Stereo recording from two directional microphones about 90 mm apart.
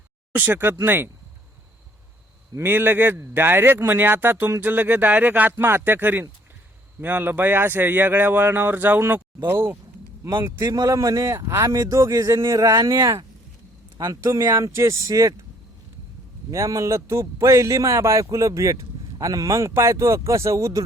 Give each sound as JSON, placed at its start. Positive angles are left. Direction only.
{"t": 0.3, "sound": "speech", "side_deg": -20}
{"t": 2.6, "sound": "speech", "side_deg": -25}
{"t": 10.6, "sound": "speech", "side_deg": -40}
{"t": 16.5, "sound": "speech", "side_deg": -35}